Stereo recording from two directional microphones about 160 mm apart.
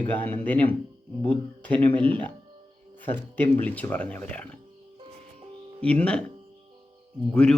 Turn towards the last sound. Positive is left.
turn(degrees=5)  # may be behind; listen again after turning